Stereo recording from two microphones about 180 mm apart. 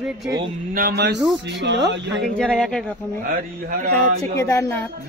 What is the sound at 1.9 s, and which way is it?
Speech, 75° right (ahead or behind).